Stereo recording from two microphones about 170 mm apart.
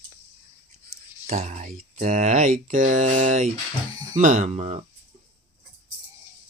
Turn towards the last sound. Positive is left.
turn(degrees=-40)  # may be behind; listen again after turning